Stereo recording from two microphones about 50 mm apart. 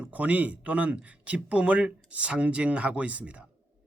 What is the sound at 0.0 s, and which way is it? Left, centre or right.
Speech, right.